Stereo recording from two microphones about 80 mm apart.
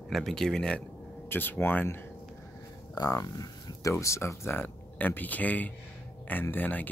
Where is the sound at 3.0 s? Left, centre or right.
Left.